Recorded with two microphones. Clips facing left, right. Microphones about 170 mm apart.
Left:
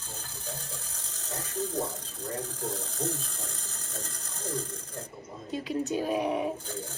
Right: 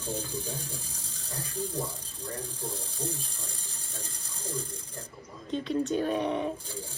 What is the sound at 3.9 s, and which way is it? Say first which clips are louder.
Ratchet: left 3 dB; 10° right (ahead or behind).